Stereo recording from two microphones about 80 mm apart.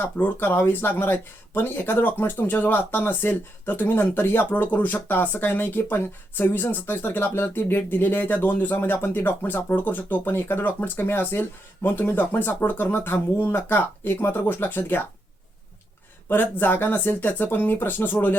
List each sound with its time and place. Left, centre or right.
0.2 s speech: left
16.3 s speech: left